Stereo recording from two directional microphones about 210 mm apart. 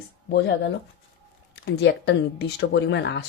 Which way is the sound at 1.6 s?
55° left (ahead or behind).